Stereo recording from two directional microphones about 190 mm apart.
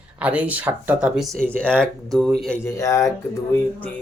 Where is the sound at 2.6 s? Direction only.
15° left (ahead or behind).